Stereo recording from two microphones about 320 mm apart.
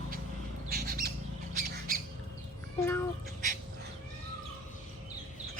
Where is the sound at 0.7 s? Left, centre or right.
Right.